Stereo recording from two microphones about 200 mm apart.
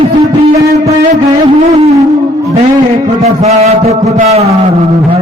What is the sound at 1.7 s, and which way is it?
Music, 30° right (ahead or behind).